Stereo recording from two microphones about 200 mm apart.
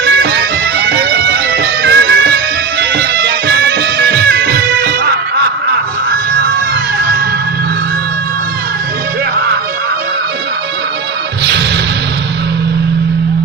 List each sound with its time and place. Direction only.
0.0 s bagpipes: 60° right (ahead or behind)
0.8 s music: 60° right (ahead or behind)